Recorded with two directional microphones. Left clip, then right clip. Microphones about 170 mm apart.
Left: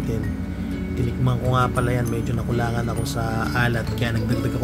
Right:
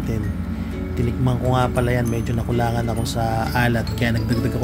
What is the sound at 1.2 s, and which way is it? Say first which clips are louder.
Speech: right 1 dB; 15° right (ahead or behind).